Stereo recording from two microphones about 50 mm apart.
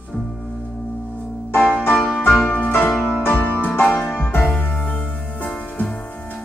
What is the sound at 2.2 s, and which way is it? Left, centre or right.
Music, left.